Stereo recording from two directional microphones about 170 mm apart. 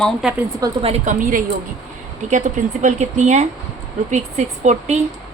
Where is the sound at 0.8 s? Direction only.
35° right (ahead or behind).